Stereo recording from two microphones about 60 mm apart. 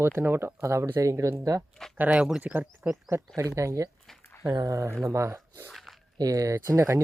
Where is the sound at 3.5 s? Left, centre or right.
Right.